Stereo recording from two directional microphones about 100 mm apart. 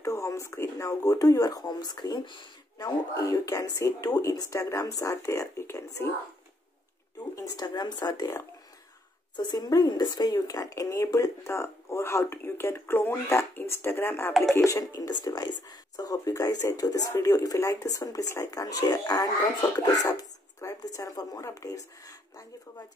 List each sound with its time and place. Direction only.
0.0 s speech: 30° left (ahead or behind); by 2.9 s 50° left (ahead or behind)
3.2 s speech: 35° left (ahead or behind)
7.3 s speech: 40° left (ahead or behind)
9.4 s speech: 45° left (ahead or behind); by 18.5 s 30° left (ahead or behind)
18.5 s speech: 40° left (ahead or behind)